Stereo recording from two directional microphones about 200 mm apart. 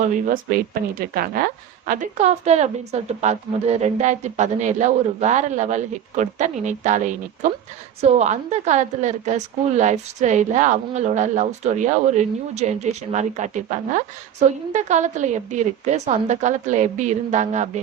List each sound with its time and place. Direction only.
0.0 s a woman's voice: 40° right (ahead or behind)